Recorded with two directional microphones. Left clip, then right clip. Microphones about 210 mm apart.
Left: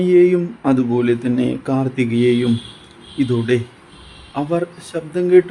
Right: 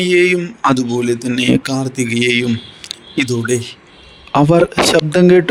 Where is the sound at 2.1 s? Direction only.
50° right (ahead or behind).